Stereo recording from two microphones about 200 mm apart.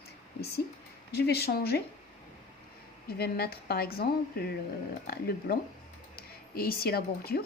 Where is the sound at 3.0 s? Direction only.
50° left (ahead or behind).